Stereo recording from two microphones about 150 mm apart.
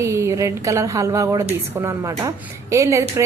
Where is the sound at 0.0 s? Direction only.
20° right (ahead or behind).